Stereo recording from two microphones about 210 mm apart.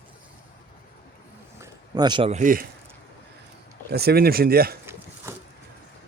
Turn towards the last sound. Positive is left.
turn(degrees=-10)  # may be behind; listen again after turning